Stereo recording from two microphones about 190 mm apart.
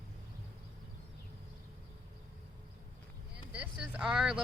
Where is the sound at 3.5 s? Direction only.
5° right (ahead or behind).